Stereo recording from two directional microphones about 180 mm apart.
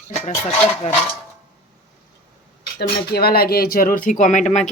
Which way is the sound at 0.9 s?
40° left (ahead or behind).